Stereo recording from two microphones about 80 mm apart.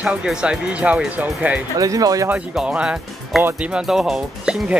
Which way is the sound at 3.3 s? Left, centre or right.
Centre.